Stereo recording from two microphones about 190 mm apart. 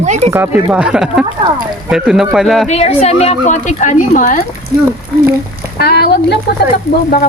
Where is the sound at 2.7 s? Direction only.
35° left (ahead or behind).